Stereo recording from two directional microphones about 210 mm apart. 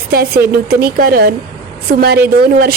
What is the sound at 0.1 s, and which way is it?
A woman's voice, 45° right (ahead or behind).